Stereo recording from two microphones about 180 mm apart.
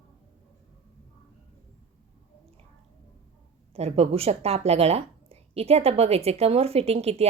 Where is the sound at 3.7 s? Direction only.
35° right (ahead or behind).